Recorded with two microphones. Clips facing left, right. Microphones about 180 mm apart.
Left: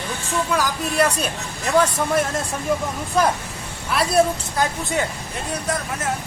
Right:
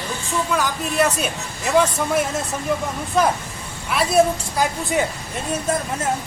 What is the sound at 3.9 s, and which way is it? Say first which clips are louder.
A woman's voice: right 1 dB; 5° right (ahead or behind).